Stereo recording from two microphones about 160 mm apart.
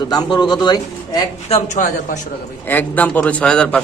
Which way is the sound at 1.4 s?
45° left (ahead or behind).